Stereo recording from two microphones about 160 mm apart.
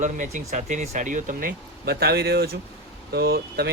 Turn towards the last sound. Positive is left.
turn(degrees=-80)